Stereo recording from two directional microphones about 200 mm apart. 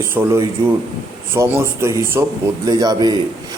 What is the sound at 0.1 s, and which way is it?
A man's voice, 10° right (ahead or behind).